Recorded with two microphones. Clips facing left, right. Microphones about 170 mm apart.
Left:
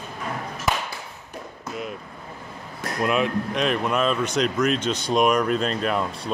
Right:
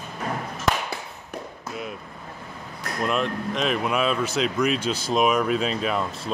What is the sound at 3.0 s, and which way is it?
Speech, 5° left (ahead or behind).